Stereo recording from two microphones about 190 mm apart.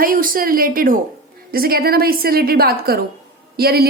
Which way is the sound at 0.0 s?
45° right (ahead or behind).